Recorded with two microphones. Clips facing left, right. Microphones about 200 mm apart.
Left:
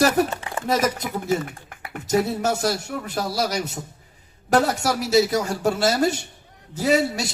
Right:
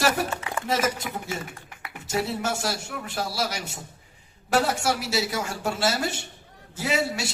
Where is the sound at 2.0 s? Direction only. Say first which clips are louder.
Left 6 dB; 40° left (ahead or behind).